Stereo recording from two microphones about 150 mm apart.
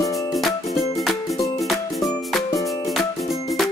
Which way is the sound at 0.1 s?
20° left (ahead or behind).